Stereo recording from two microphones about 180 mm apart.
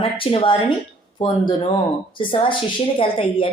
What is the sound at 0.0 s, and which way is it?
A woman's voice, 30° left (ahead or behind).